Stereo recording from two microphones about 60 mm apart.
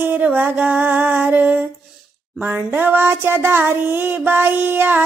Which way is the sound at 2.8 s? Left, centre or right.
Right.